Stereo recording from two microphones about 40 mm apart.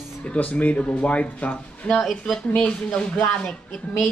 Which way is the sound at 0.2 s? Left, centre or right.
Left.